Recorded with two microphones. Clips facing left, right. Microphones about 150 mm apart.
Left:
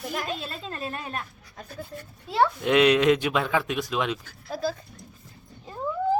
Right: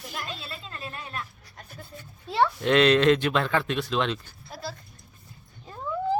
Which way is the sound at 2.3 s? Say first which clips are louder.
Left 1 dB; 10° left (ahead or behind).